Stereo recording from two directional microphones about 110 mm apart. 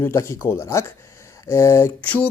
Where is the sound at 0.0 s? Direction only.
25° left (ahead or behind).